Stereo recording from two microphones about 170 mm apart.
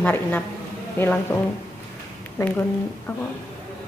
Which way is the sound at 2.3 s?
10° left (ahead or behind).